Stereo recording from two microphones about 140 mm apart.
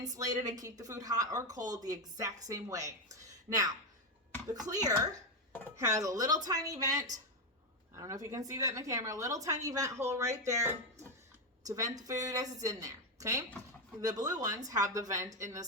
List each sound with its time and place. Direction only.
0.0 s a woman's voice: 25° right (ahead or behind)